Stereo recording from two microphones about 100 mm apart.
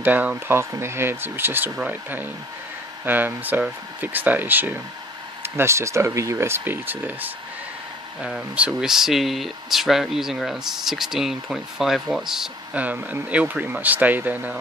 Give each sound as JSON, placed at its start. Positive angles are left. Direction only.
{"t": 0.0, "sound": "speech", "side_deg": -15}
{"t": 12.7, "sound": "speech", "side_deg": -15}